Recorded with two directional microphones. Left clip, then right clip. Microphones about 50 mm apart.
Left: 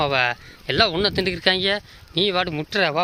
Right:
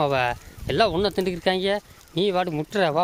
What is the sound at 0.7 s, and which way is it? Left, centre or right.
Speech, right.